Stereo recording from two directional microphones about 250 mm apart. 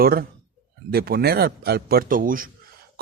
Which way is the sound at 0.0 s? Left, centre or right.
Right.